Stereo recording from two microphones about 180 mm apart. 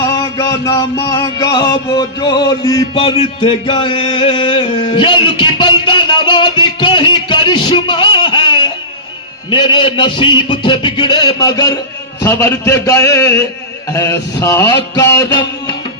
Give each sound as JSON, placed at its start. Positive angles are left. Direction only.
{"t": 0.0, "sound": "music", "side_deg": 20}
{"t": 9.5, "sound": "a man's voice", "side_deg": 25}